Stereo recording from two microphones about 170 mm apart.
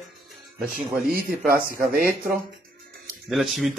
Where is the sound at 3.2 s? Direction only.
Centre (ahead or behind).